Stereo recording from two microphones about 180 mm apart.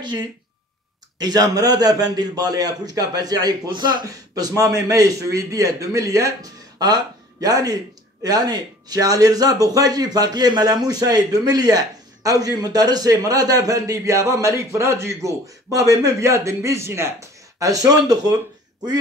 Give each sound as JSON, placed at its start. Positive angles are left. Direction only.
{"t": 0.0, "sound": "speech", "side_deg": -25}